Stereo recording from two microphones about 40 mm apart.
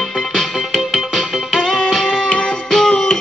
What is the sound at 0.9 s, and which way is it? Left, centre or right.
Music, centre.